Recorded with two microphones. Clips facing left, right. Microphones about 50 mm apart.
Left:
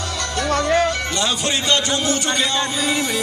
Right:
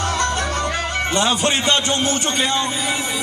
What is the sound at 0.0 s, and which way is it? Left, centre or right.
Speech, right.